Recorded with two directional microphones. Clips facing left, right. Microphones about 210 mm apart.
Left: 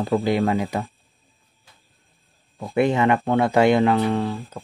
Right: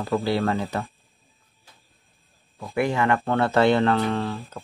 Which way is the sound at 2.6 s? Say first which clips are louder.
Left 4 dB; 20° left (ahead or behind).